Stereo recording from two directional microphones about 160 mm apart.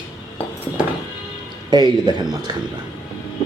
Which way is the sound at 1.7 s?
25° right (ahead or behind).